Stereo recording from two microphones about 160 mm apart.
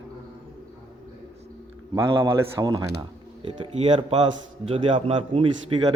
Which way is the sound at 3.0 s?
35° right (ahead or behind).